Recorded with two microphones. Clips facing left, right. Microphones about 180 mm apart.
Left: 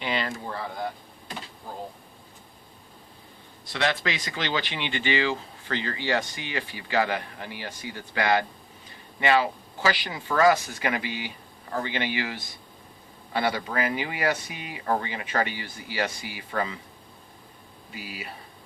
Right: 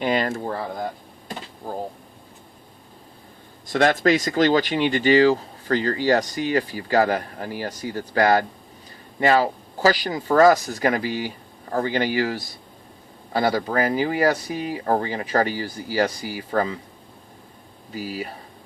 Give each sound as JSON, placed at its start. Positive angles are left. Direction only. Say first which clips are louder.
{"t": 0.0, "sound": "speech", "louder": "right 7 dB", "side_deg": -45}
{"t": 1.6, "sound": "a sound", "louder": "right 10 dB", "side_deg": -45}
{"t": 3.7, "sound": "speech", "louder": "right 9 dB", "side_deg": -45}
{"t": 17.9, "sound": "speech", "louder": "right 10 dB", "side_deg": -40}